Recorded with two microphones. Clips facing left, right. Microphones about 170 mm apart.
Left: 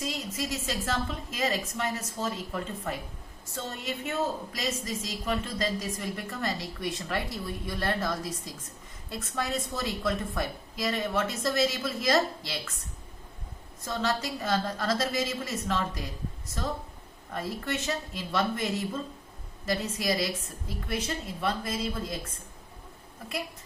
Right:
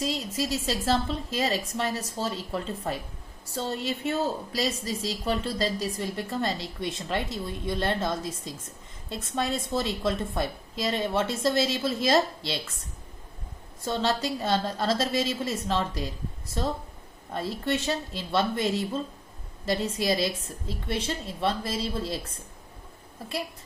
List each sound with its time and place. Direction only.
0.0 s a woman's voice: 30° right (ahead or behind)
13.8 s a woman's voice: 30° right (ahead or behind)
17.3 s a woman's voice: 30° right (ahead or behind)